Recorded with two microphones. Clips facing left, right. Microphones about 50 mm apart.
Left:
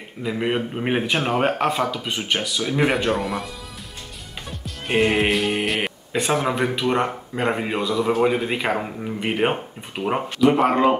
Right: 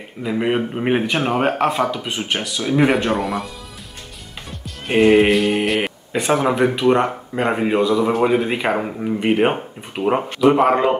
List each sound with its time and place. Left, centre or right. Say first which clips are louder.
0.2 s speech: right 4 dB; centre
4.6 s speech: right 6 dB; centre